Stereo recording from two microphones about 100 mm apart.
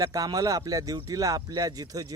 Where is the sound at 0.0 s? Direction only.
35° right (ahead or behind).